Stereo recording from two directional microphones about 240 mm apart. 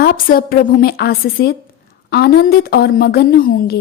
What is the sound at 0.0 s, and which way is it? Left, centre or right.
A woman's voice, left.